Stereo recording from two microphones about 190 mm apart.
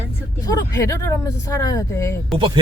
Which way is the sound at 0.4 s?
15° left (ahead or behind).